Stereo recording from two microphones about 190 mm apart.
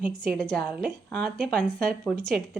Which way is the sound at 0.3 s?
5° left (ahead or behind).